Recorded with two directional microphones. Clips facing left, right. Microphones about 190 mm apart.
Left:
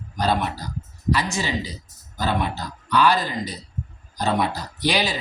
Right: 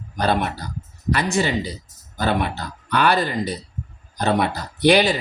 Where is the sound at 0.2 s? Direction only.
55° right (ahead or behind).